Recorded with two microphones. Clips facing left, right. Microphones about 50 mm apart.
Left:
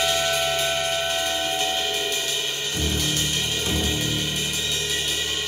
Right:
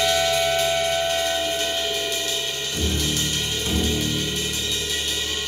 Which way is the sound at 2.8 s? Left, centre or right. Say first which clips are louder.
Right 1 dB; centre.